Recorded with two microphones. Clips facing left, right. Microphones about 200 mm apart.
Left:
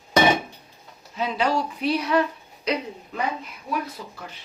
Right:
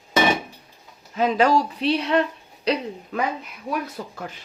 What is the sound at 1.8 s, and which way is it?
Speech, 30° right (ahead or behind).